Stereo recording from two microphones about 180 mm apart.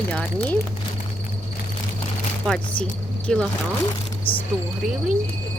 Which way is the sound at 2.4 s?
Centre (ahead or behind).